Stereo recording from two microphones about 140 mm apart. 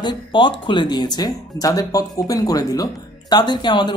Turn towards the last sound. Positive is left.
turn(degrees=35)  # may be behind; listen again after turning